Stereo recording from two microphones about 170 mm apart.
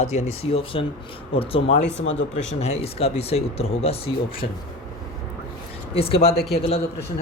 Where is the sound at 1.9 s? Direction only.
90° left.